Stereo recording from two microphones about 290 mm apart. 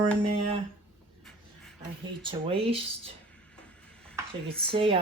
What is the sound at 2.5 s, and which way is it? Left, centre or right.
Speech, centre.